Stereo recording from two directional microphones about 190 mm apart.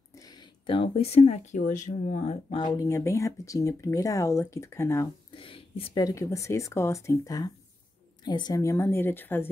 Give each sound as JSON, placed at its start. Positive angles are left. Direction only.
{"t": 0.1, "sound": "speech", "side_deg": 20}
{"t": 5.3, "sound": "a sound", "side_deg": 30}
{"t": 6.0, "sound": "speech", "side_deg": 15}